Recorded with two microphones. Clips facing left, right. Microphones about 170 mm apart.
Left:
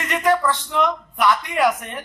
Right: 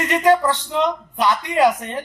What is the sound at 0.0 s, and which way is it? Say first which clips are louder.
Speech: right 3 dB; 20° right (ahead or behind).